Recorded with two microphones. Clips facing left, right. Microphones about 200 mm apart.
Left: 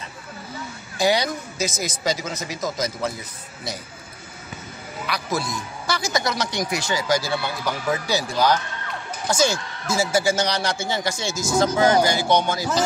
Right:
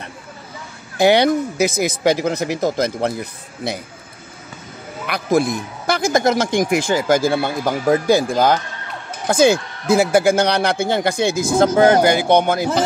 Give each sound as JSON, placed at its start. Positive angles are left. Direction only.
{"t": 0.9, "sound": "speech", "side_deg": -60}
{"t": 5.0, "sound": "speech", "side_deg": -55}